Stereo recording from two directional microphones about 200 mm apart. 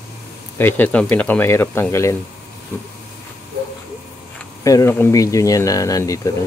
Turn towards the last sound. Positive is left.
turn(degrees=15)  # may be behind; listen again after turning